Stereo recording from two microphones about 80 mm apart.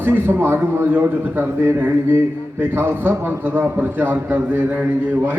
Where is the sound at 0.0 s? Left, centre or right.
Right.